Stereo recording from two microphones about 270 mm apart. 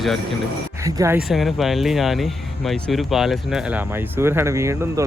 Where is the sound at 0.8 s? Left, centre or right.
Centre.